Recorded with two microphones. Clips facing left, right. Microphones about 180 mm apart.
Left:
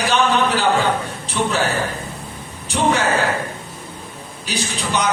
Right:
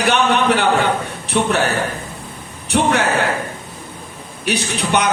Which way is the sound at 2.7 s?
60° right (ahead or behind).